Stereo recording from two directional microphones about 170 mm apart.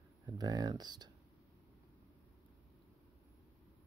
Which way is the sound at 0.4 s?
25° right (ahead or behind).